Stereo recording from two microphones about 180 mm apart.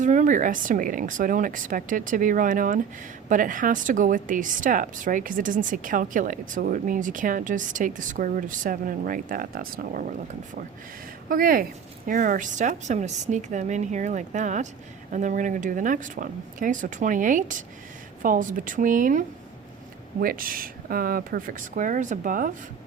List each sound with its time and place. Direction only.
0.0 s a woman's voice: 45° right (ahead or behind)
11.3 s a woman's voice: 50° right (ahead or behind)